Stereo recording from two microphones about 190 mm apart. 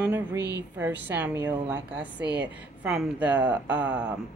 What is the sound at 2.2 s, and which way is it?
Speech, 60° right (ahead or behind).